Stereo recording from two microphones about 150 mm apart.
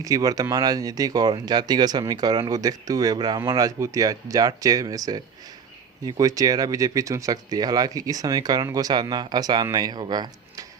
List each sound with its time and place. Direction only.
0.0 s speech: 25° right (ahead or behind)